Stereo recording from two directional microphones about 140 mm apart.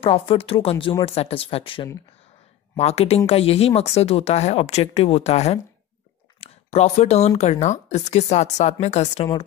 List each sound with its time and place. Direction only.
0.0 s speech: 40° left (ahead or behind)
2.8 s speech: 50° left (ahead or behind)